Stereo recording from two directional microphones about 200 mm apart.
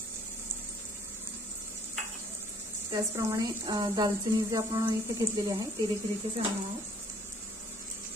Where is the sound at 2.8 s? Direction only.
15° right (ahead or behind).